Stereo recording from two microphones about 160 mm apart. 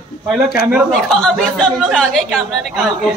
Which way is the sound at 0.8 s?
5° left (ahead or behind).